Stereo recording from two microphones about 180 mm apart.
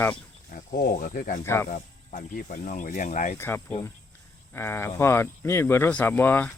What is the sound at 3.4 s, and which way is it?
Speech, 15° left (ahead or behind).